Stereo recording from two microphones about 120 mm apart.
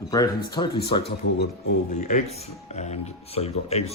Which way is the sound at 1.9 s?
70° left (ahead or behind).